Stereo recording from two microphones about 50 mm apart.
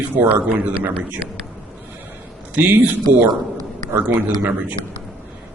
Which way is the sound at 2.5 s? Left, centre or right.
Right.